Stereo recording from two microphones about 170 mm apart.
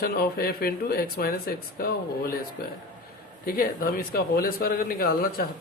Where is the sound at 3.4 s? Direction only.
60° left (ahead or behind).